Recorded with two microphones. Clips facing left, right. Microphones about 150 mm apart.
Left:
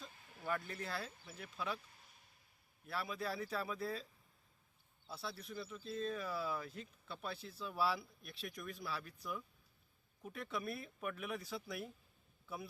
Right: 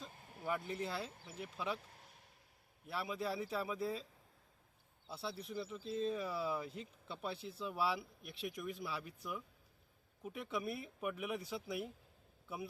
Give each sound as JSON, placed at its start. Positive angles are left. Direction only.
{"t": 0.4, "sound": "speech", "side_deg": -15}
{"t": 1.9, "sound": "a sound", "side_deg": -70}
{"t": 2.8, "sound": "speech", "side_deg": -20}
{"t": 5.0, "sound": "speech", "side_deg": -20}